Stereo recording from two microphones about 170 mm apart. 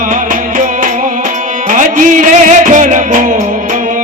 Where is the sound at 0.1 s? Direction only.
50° right (ahead or behind).